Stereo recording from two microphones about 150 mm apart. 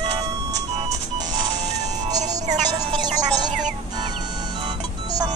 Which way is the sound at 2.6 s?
25° right (ahead or behind).